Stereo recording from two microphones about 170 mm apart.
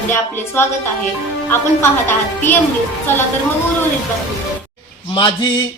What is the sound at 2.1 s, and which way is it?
Speech, 10° left (ahead or behind).